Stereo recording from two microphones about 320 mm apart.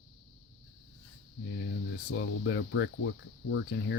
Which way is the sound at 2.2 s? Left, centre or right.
Left.